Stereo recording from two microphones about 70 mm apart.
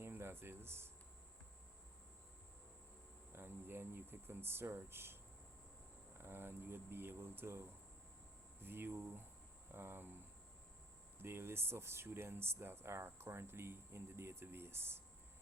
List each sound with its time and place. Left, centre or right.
0.0 s a sound: right
3.3 s speech: right
6.1 s speech: right
8.6 s speech: right